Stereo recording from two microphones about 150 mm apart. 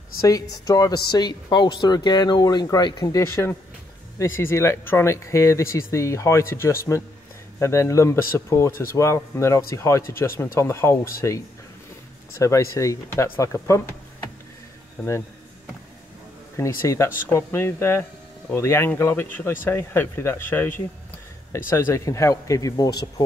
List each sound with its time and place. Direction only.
0.2 s speech: 25° left (ahead or behind)
16.5 s speech: 20° left (ahead or behind)